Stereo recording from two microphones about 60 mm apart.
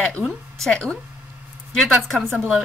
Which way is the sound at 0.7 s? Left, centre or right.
Centre.